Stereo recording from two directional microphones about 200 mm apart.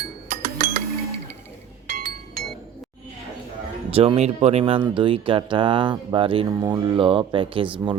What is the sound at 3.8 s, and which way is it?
Speech, 30° right (ahead or behind).